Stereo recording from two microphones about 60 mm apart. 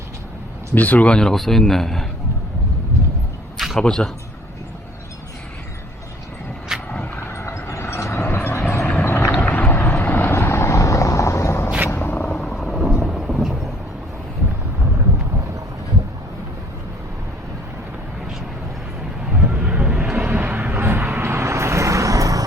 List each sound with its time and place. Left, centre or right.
0.7 s speech: left
1.3 s a man's voice: centre
3.8 s speech: centre
6.7 s vehicle: centre
7.3 s vehicle: left
11.9 s a sound: left
12.8 s thunder: centre
19.3 s vehicle: centre; by 22.4 s right